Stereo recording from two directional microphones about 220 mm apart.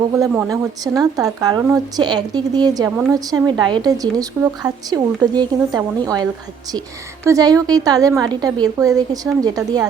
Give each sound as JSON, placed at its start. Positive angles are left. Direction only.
{"t": 0.2, "sound": "speech", "side_deg": -15}
{"t": 7.3, "sound": "speech", "side_deg": -15}